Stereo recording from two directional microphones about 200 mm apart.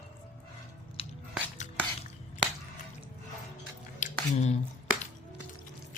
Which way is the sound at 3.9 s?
35° left (ahead or behind).